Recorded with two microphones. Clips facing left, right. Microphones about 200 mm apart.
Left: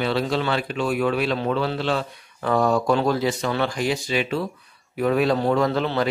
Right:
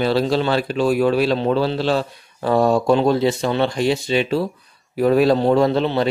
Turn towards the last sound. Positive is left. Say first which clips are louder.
# right 4 dB
turn(degrees=-25)  # may be behind; listen again after turning